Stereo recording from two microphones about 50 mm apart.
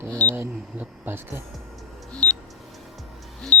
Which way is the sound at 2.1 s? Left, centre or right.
Left.